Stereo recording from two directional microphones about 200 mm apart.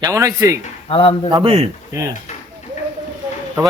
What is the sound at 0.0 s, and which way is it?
Speech, 15° right (ahead or behind).